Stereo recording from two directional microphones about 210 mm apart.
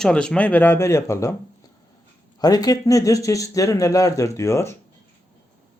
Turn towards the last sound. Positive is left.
turn(degrees=15)  # may be behind; listen again after turning